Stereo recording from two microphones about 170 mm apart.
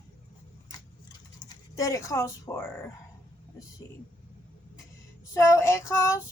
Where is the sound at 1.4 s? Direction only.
20° left (ahead or behind).